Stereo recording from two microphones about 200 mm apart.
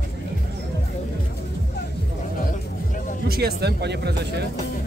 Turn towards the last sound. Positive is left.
turn(degrees=-55)  # may be behind; listen again after turning